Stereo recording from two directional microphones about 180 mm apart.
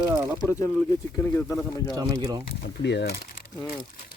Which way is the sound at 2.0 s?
20° right (ahead or behind).